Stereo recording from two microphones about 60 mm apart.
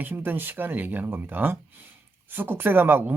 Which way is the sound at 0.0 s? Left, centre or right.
Right.